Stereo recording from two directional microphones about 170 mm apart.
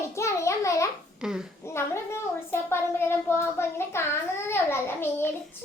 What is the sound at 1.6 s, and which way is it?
A child's voice, 15° left (ahead or behind).